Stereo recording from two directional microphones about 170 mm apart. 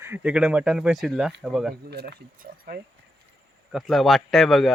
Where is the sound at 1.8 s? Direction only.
75° right (ahead or behind).